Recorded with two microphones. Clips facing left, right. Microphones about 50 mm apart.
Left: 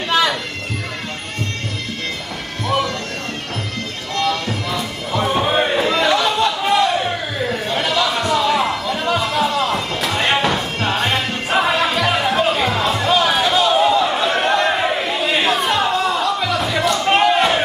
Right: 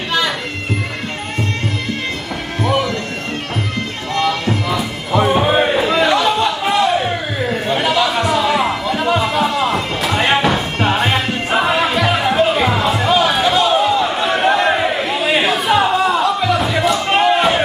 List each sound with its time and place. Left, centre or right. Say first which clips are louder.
2.6 s music: right 2 dB; centre
4.1 s music: right 3 dB; centre